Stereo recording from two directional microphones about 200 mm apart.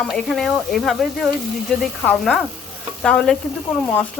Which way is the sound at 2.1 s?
5° left (ahead or behind).